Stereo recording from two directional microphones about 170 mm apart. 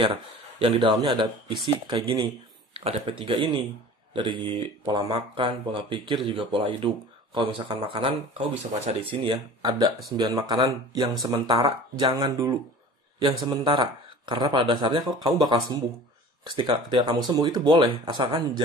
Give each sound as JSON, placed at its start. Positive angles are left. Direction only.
{"t": 0.0, "sound": "speech", "side_deg": -30}